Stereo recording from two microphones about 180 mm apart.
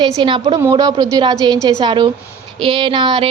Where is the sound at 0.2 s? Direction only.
30° right (ahead or behind).